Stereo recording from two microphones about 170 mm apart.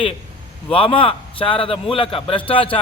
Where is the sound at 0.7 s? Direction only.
35° left (ahead or behind).